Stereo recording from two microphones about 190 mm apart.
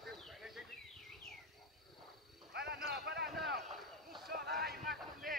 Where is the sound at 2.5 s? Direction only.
60° right (ahead or behind).